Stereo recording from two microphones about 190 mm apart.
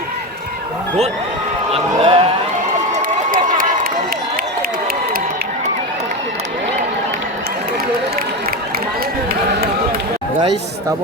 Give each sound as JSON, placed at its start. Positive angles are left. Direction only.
{"t": 1.7, "sound": "speech", "side_deg": -30}
{"t": 2.9, "sound": "run", "side_deg": -45}